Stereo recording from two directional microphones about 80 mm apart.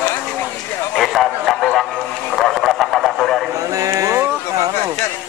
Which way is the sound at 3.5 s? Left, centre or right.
Right.